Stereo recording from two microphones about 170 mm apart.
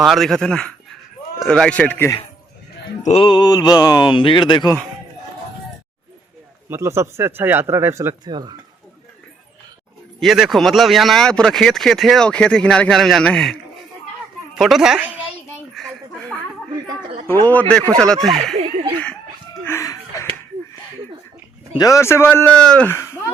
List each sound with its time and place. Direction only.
0.0 s speech: centre (ahead or behind)
3.0 s speech: 35° left (ahead or behind)
6.7 s speech: 15° right (ahead or behind)
10.2 s speech: centre (ahead or behind)
15.7 s a sound: centre (ahead or behind)
17.5 s speech: 10° left (ahead or behind)
19.6 s a sound: 15° left (ahead or behind)
21.8 s speech: 20° left (ahead or behind)